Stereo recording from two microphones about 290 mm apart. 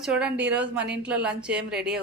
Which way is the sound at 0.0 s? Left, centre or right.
Centre.